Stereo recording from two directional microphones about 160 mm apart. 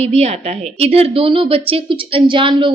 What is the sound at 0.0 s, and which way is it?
A woman's voice, 40° right (ahead or behind).